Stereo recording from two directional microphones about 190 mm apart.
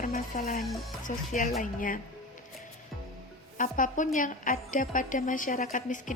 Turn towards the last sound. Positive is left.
turn(degrees=40)  # may be behind; listen again after turning